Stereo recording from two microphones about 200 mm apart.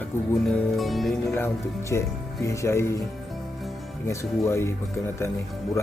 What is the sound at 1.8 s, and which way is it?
Speech, 15° left (ahead or behind).